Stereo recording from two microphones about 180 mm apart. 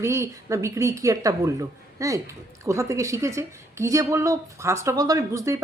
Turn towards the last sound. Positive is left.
turn(degrees=-15)  # may be behind; listen again after turning